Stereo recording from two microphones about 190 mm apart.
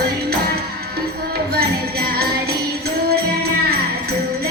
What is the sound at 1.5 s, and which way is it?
Music, 55° right (ahead or behind).